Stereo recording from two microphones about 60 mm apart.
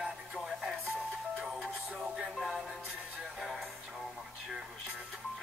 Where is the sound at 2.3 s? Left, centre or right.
Centre.